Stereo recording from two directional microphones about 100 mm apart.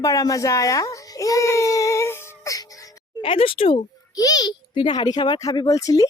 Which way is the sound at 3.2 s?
65° left (ahead or behind).